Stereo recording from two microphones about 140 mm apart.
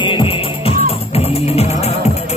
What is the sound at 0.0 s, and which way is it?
Music, 35° left (ahead or behind).